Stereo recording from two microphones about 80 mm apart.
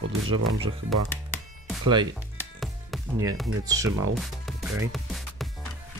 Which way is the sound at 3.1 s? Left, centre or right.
Right.